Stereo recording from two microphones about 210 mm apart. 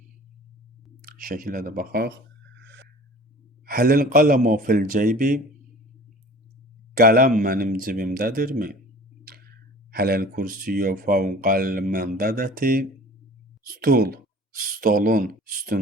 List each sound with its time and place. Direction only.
1.0 s speech: 45° right (ahead or behind)
3.7 s speech: 45° right (ahead or behind)
6.9 s speech: 45° right (ahead or behind)
9.9 s speech: 45° right (ahead or behind)